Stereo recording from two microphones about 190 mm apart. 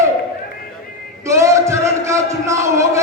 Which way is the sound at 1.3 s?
15° right (ahead or behind).